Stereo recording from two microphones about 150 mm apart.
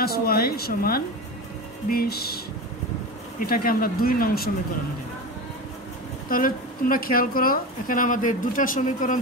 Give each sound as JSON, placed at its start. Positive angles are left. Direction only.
{"t": 0.0, "sound": "speech", "side_deg": 90}
{"t": 3.3, "sound": "speech", "side_deg": 75}
{"t": 6.2, "sound": "speech", "side_deg": 70}